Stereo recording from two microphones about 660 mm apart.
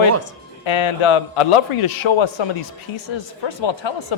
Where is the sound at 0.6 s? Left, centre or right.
Left.